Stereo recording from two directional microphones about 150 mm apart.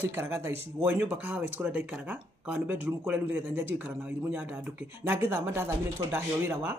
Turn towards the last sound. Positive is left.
turn(degrees=-15)  # may be behind; listen again after turning